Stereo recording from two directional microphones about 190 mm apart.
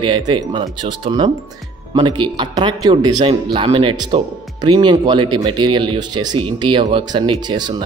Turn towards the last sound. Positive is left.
turn(degrees=-25)  # may be behind; listen again after turning